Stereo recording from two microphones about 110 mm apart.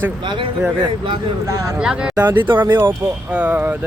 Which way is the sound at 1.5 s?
30° right (ahead or behind).